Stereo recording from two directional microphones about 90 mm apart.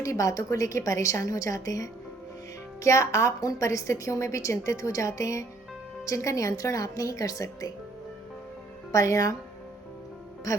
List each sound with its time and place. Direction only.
0.0 s a woman's voice: 35° left (ahead or behind)
8.9 s a woman's voice: 35° left (ahead or behind)
10.5 s speech: 40° left (ahead or behind)